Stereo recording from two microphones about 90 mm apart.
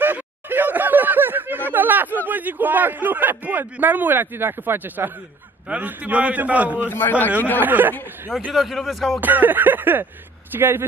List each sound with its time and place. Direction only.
0.0 s a sound: 20° right (ahead or behind)
1.7 s chatter: 20° right (ahead or behind)
2.2 s a man's voice: 20° right (ahead or behind)
6.9 s a man's voice: 25° left (ahead or behind)
7.6 s a man's voice: 20° right (ahead or behind)
8.5 s speech: centre (ahead or behind)
9.2 s a man's voice: 20° right (ahead or behind)